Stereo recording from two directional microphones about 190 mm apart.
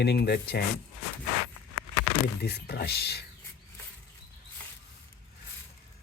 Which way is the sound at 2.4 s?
55° left (ahead or behind).